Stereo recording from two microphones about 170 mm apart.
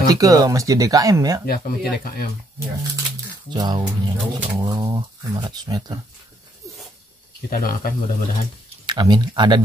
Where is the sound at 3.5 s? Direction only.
25° right (ahead or behind).